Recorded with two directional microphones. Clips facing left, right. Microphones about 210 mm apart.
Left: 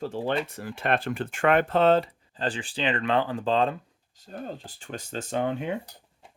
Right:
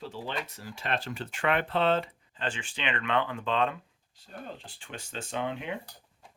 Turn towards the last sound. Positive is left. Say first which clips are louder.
# left 6 dB
turn(degrees=40)  # may be behind; listen again after turning